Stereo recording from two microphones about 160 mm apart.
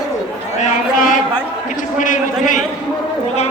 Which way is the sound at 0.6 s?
55° left (ahead or behind).